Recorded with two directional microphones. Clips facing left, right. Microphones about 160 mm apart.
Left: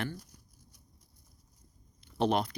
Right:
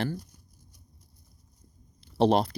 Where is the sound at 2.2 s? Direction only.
35° right (ahead or behind).